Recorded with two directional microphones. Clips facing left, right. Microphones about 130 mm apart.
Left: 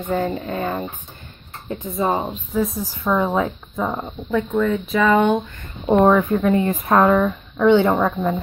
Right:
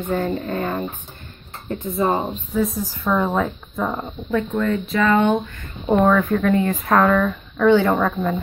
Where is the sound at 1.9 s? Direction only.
Centre (ahead or behind).